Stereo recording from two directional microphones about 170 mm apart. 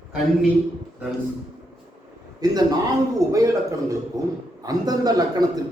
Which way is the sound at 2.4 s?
20° right (ahead or behind).